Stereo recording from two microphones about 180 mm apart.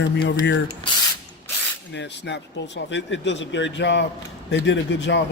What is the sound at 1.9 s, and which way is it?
Speech, 75° left (ahead or behind).